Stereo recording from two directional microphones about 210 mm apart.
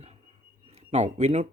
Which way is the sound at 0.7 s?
30° right (ahead or behind).